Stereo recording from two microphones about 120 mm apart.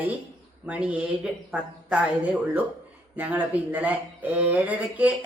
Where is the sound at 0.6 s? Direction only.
10° right (ahead or behind).